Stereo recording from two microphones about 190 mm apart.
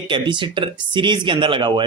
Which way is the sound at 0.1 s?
25° right (ahead or behind).